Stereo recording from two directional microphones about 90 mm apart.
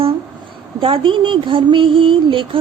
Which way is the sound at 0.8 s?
85° right.